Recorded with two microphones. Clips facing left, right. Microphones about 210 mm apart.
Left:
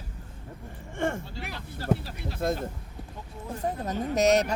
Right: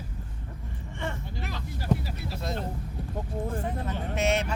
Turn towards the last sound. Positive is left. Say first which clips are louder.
# left 5 dB
turn(degrees=40)  # may be behind; listen again after turning